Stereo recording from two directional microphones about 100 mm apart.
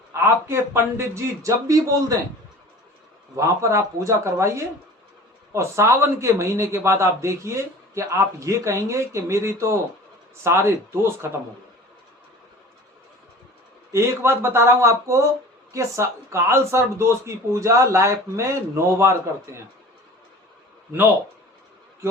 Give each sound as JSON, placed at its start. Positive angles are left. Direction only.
{"t": 0.1, "sound": "speech", "side_deg": -25}
{"t": 3.3, "sound": "speech", "side_deg": -30}
{"t": 13.9, "sound": "speech", "side_deg": -25}